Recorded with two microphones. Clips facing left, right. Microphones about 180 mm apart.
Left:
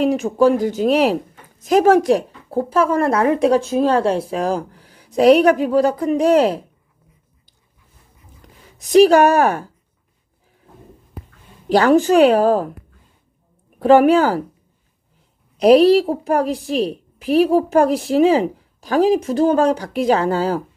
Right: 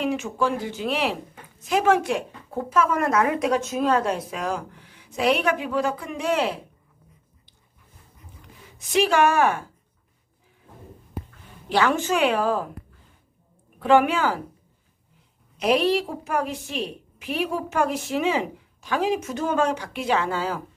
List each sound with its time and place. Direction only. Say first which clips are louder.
0.0 s a woman's voice: left 9 dB; 40° left (ahead or behind)
8.7 s a woman's voice: left 10 dB; 40° left (ahead or behind)
11.7 s a woman's voice: left 9 dB; 35° left (ahead or behind)
13.7 s a woman's voice: left 8 dB; 40° left (ahead or behind)
15.5 s a woman's voice: left 10 dB; 35° left (ahead or behind)